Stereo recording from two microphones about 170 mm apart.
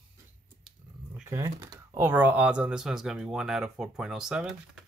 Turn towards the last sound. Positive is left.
turn(degrees=-5)  # may be behind; listen again after turning